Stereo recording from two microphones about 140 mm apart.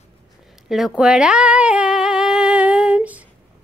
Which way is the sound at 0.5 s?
Centre (ahead or behind).